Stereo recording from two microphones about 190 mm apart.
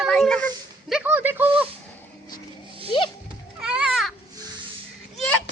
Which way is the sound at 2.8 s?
25° left (ahead or behind).